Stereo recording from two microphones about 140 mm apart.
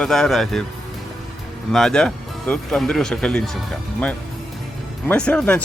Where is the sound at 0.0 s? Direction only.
5° left (ahead or behind).